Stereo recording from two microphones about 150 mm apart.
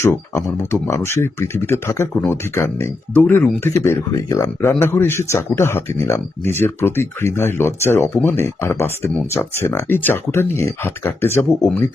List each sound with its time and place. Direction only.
0.7 s speech: 20° left (ahead or behind)